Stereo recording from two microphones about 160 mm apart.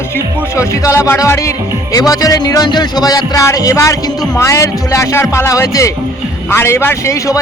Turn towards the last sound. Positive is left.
turn(degrees=20)  # may be behind; listen again after turning